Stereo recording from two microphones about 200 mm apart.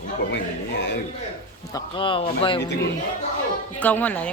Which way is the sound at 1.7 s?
25° left (ahead or behind).